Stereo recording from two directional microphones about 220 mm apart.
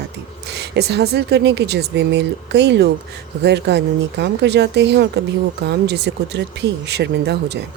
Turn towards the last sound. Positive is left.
turn(degrees=-50)  # may be behind; listen again after turning